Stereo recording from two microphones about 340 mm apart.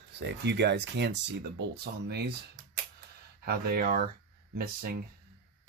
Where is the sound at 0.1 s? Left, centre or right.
Right.